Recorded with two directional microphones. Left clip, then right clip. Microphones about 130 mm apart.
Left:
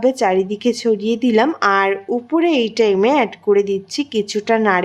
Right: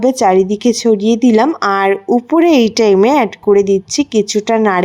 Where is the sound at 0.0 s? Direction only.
30° right (ahead or behind).